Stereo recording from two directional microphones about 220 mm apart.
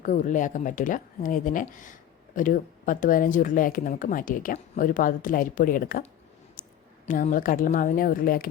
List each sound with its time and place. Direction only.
0.0 s speech: 35° left (ahead or behind)